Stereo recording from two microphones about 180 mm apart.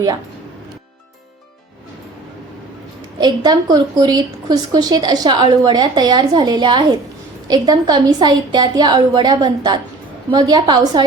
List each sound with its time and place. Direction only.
3.2 s a woman's voice: 25° right (ahead or behind)